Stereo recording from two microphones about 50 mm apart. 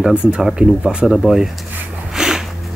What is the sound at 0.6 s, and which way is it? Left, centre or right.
Speech, right.